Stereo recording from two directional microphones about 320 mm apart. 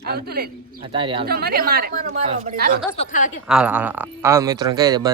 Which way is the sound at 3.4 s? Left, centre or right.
Centre.